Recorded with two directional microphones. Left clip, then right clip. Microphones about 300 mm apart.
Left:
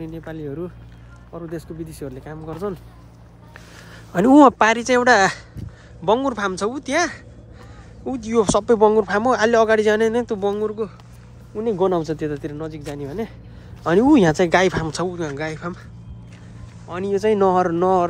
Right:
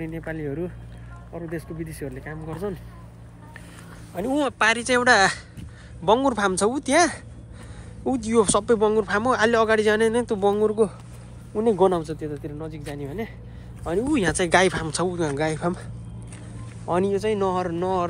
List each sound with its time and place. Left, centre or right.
0.0 s speech: centre
4.6 s speech: left
12.2 s speech: left; by 15.8 s centre
16.8 s speech: centre
17.1 s speech: left